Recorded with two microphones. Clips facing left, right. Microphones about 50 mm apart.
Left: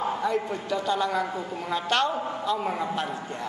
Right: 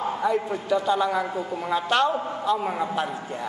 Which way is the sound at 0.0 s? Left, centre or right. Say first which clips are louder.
Right 2 dB; centre.